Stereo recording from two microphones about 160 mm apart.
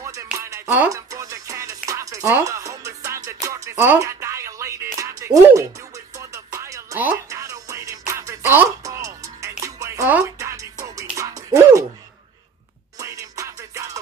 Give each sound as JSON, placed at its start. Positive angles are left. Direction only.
{"t": 0.0, "sound": "music", "side_deg": -20}
{"t": 13.0, "sound": "music", "side_deg": -20}